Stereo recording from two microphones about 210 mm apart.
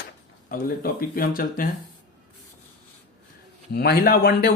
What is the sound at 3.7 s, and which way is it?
Speech, 50° left (ahead or behind).